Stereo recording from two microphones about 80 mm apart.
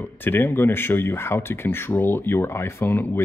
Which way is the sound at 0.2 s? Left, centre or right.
Left.